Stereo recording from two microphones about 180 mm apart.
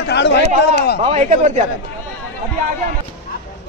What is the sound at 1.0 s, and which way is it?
Speech, 45° right (ahead or behind).